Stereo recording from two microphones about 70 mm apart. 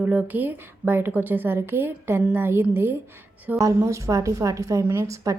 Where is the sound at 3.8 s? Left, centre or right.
Right.